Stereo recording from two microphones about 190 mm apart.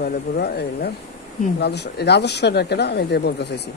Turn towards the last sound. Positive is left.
turn(degrees=60)  # may be behind; listen again after turning